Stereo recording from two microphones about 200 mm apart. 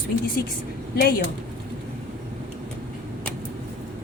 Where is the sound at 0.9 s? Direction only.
50° left (ahead or behind).